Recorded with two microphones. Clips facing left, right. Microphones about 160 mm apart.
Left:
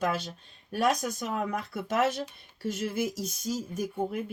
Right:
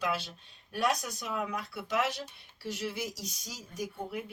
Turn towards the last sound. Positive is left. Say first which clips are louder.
# left 6 dB
turn(degrees=50)  # may be behind; listen again after turning